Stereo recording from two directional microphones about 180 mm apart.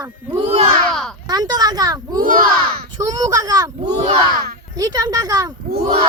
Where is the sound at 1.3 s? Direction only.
20° right (ahead or behind).